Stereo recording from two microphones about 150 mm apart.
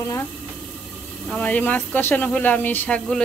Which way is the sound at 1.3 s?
10° left (ahead or behind).